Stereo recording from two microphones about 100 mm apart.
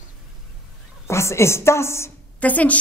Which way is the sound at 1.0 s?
25° left (ahead or behind).